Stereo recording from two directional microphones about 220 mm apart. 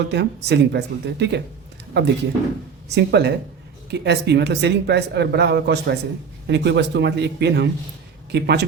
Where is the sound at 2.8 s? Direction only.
50° right (ahead or behind).